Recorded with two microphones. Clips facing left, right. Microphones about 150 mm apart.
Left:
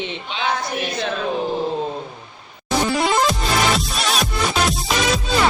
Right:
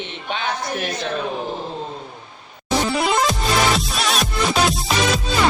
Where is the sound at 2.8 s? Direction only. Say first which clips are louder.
Left 2 dB; centre (ahead or behind).